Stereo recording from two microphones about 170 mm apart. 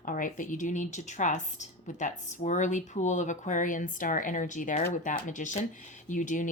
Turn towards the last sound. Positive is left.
turn(degrees=45)  # may be behind; listen again after turning